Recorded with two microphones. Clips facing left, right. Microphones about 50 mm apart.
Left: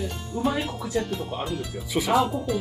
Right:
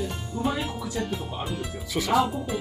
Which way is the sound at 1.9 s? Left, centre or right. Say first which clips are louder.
Left 2 dB; centre.